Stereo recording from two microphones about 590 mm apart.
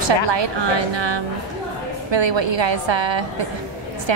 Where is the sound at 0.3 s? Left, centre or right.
Right.